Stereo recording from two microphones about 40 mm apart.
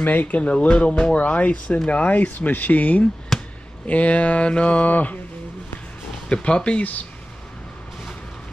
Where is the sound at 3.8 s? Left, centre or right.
Left.